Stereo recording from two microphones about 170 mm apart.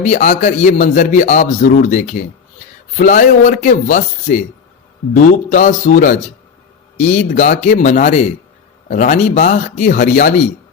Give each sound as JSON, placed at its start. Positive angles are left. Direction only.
{"t": 0.0, "sound": "a man's voice", "side_deg": 45}